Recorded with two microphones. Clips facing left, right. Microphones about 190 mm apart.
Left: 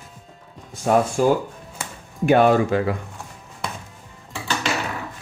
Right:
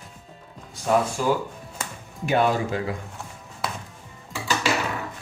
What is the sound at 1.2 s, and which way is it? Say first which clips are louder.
Speech: left 5 dB; 50° left (ahead or behind).